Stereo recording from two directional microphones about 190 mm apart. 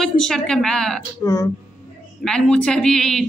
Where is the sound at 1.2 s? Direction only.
20° left (ahead or behind).